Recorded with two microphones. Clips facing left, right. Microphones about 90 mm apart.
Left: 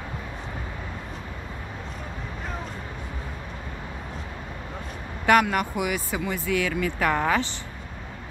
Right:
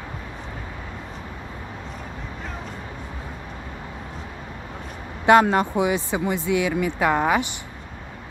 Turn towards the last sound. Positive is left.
turn(degrees=-15)  # may be behind; listen again after turning